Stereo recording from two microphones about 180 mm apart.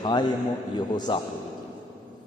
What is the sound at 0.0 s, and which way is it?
A man's voice, 25° left (ahead or behind).